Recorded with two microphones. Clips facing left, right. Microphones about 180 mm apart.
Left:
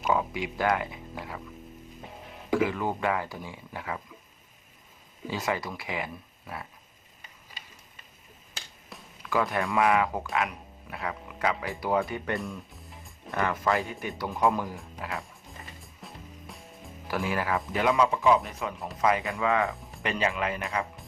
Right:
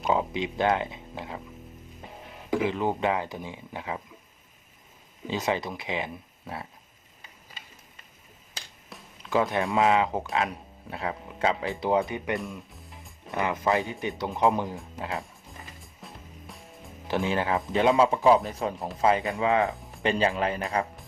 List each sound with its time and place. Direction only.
0.1 s speech: 20° right (ahead or behind)
2.6 s speech: 20° right (ahead or behind)
5.3 s speech: 20° right (ahead or behind)
8.9 s a sound: centre (ahead or behind)
9.3 s speech: 20° right (ahead or behind)
12.4 s music: centre (ahead or behind)
13.3 s speech: 20° right (ahead or behind)
15.2 s music: centre (ahead or behind)
17.1 s speech: 25° right (ahead or behind)
19.7 s music: centre (ahead or behind)
20.0 s speech: 30° right (ahead or behind)